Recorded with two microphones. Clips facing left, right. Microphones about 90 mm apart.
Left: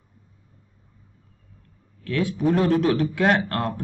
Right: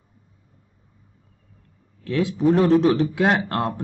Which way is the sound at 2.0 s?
20° right (ahead or behind).